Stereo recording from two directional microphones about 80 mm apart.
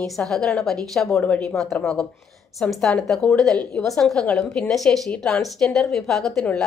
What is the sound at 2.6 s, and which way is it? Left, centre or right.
A woman's voice, centre.